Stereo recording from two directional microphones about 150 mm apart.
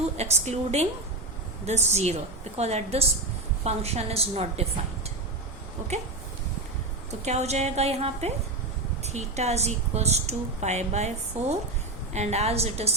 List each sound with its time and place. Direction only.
0.2 s a woman's voice: 45° right (ahead or behind)
7.3 s a woman's voice: 45° right (ahead or behind)